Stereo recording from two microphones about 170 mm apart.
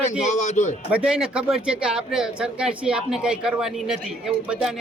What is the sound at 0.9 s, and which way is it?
Speech, 5° right (ahead or behind).